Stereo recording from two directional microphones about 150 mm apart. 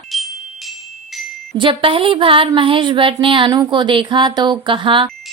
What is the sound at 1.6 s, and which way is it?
A woman's voice, 35° right (ahead or behind).